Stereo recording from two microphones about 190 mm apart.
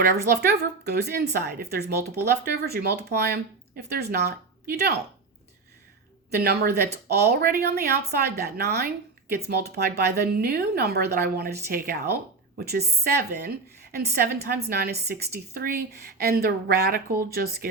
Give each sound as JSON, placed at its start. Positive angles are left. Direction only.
{"t": 0.3, "sound": "a woman's voice", "side_deg": -60}
{"t": 6.3, "sound": "a woman's voice", "side_deg": -55}
{"t": 13.9, "sound": "a woman's voice", "side_deg": -55}